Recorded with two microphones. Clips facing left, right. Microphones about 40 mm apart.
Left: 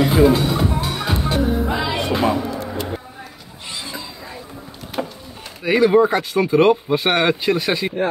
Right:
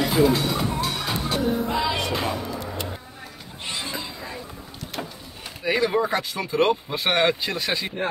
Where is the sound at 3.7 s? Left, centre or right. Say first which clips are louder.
Even; right.